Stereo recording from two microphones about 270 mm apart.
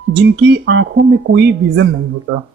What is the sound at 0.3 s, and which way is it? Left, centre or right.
Speech, right.